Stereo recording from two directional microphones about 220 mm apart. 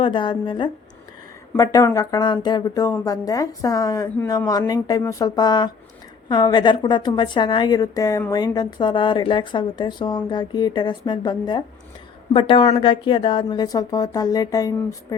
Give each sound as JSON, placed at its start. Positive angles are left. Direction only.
{"t": 0.0, "sound": "a woman's voice", "side_deg": 20}